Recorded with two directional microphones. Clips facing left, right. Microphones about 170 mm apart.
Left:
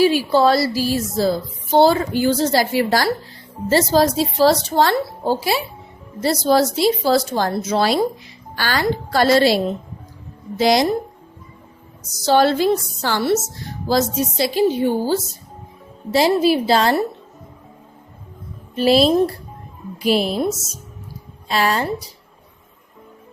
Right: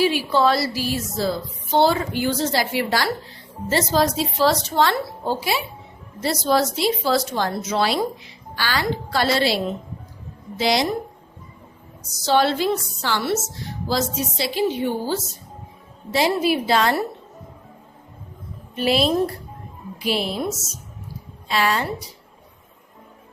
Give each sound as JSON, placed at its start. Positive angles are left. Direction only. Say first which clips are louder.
{"t": 0.0, "sound": "a woman's voice", "louder": "left 4 dB", "side_deg": 40}
{"t": 10.6, "sound": "a woman's voice", "louder": "left 5 dB", "side_deg": 45}
{"t": 12.2, "sound": "a woman's voice", "louder": "left 4 dB", "side_deg": 40}
{"t": 18.8, "sound": "a woman's voice", "louder": "left 5 dB", "side_deg": 35}
{"t": 21.4, "sound": "a woman's voice", "louder": "left 2 dB", "side_deg": 40}